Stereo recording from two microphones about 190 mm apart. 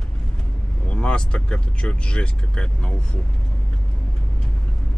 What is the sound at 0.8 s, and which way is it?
Speech, 5° left (ahead or behind).